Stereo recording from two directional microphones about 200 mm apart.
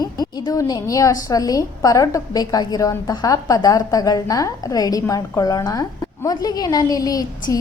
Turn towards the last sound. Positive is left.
turn(degrees=15)  # may be behind; listen again after turning